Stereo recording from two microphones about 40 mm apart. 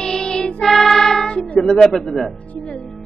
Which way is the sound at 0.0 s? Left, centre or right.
Centre.